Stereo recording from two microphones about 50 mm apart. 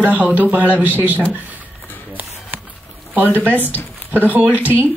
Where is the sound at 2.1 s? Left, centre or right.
Right.